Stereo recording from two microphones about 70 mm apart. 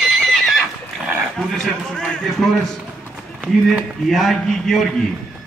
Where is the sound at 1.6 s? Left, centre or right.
Centre.